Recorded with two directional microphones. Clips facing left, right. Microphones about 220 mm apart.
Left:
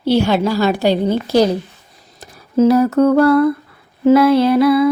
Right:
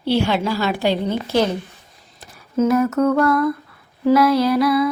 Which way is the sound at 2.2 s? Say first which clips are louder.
Left 5 dB; 35° left (ahead or behind).